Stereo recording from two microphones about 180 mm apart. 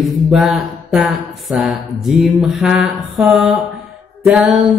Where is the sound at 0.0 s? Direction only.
Centre (ahead or behind).